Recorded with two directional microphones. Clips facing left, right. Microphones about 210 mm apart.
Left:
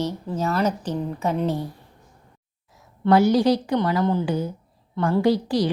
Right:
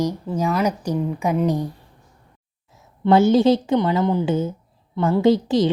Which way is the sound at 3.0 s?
25° right (ahead or behind).